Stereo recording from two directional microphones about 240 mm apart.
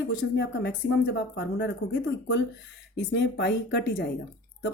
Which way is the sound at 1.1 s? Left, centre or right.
Left.